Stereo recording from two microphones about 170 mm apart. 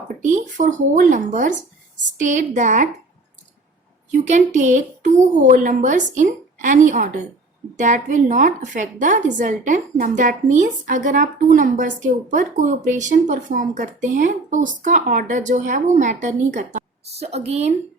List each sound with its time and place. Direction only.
0.2 s a woman's voice: 45° right (ahead or behind)
4.1 s a woman's voice: 45° right (ahead or behind)